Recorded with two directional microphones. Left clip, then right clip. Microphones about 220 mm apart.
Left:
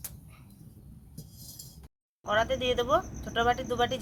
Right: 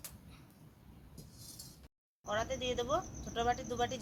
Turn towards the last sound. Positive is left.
turn(degrees=-5)  # may be behind; listen again after turning